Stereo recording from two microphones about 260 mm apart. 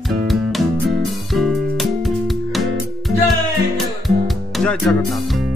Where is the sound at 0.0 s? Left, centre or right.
Centre.